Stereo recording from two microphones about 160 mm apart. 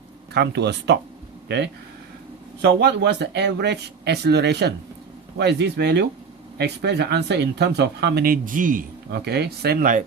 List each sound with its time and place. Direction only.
0.3 s speech: 90° right; by 10.0 s 65° right (ahead or behind)